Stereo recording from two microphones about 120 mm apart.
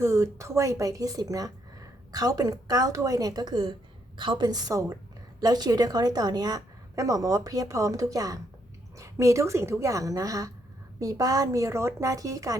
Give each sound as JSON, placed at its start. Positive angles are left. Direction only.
{"t": 0.0, "sound": "a woman's voice", "side_deg": -25}